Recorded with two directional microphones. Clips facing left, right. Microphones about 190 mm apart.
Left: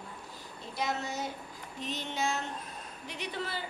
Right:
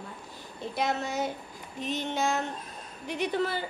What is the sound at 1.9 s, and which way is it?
Female singing, 50° right (ahead or behind).